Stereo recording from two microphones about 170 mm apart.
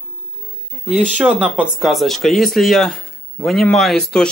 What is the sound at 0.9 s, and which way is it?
Speech, 10° right (ahead or behind).